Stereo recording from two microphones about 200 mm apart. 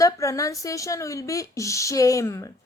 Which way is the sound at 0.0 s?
15° left (ahead or behind).